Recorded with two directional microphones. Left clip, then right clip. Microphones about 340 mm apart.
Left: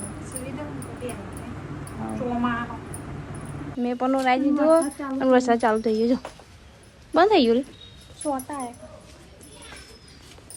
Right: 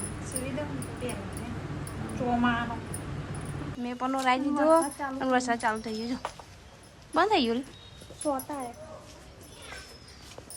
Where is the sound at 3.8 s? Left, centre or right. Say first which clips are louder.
Left 7 dB; centre.